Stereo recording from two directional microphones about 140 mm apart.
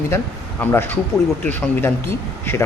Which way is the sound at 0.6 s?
15° left (ahead or behind).